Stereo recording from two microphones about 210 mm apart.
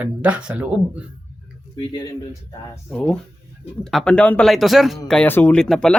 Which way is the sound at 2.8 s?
5° left (ahead or behind).